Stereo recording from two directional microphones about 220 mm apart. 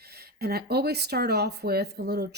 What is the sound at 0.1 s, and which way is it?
Speech, 45° right (ahead or behind).